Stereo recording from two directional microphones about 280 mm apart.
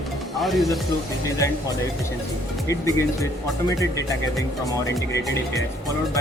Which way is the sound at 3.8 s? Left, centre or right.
Centre.